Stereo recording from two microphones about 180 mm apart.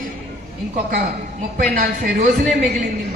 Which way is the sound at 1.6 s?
50° right (ahead or behind).